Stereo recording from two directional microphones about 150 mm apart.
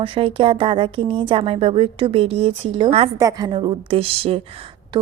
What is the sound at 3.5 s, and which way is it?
Speech, 35° right (ahead or behind).